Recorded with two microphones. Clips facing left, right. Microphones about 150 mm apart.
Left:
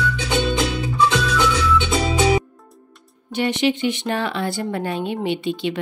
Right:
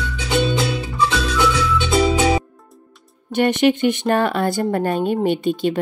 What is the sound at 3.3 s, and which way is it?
A woman's voice, 50° right (ahead or behind).